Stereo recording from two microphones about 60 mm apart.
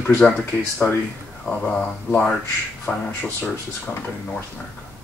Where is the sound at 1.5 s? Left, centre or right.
Centre.